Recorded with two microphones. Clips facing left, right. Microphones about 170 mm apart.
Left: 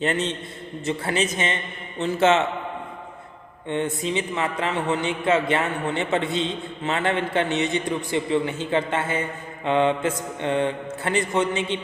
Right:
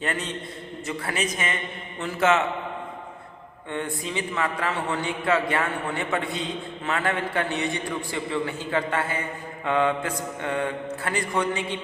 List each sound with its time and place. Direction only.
0.0 s a man's voice: 25° left (ahead or behind)
3.7 s a man's voice: 20° left (ahead or behind)